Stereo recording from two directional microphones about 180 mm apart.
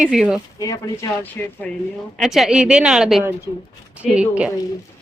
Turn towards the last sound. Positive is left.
turn(degrees=-5)  # may be behind; listen again after turning